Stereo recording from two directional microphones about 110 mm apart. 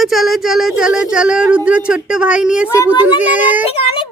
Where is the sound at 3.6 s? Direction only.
60° left (ahead or behind).